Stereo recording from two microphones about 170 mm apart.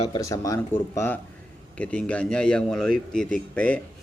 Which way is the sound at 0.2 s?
20° left (ahead or behind).